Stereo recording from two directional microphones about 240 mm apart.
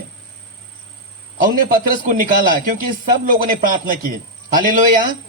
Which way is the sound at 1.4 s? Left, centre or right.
Right.